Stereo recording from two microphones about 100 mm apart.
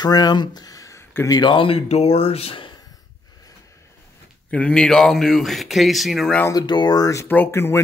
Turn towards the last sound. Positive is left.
turn(degrees=25)  # may be behind; listen again after turning